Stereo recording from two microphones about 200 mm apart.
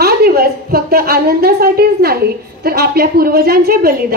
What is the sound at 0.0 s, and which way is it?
A woman's voice, 50° right (ahead or behind).